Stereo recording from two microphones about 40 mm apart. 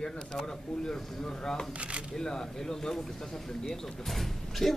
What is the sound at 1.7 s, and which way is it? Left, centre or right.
Speech, right.